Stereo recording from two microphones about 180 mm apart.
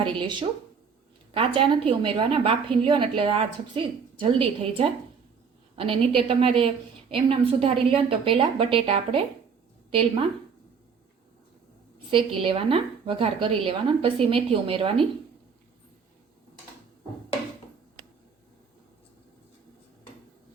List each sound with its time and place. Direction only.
0.0 s a woman's voice: 25° right (ahead or behind)
12.1 s a woman's voice: 30° right (ahead or behind)